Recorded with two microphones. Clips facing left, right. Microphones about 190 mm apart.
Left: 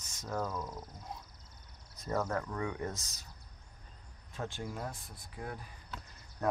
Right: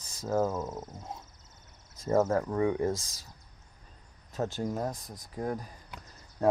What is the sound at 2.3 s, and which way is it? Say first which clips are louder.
Speech: right 9 dB; 30° right (ahead or behind).